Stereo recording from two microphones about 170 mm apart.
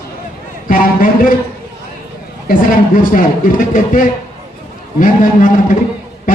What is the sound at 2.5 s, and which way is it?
Speech, 55° left (ahead or behind).